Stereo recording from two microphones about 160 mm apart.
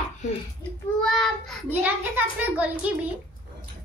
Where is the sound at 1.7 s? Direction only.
10° right (ahead or behind).